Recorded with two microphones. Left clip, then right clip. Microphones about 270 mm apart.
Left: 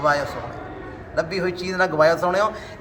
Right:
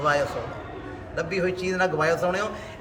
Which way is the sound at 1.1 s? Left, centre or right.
Centre.